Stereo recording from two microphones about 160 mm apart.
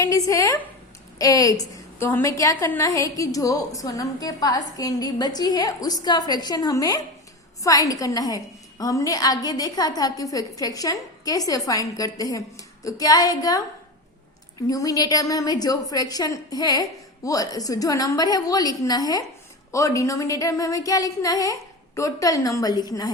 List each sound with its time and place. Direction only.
0.0 s a woman's voice: 20° left (ahead or behind)
14.7 s a woman's voice: 20° left (ahead or behind)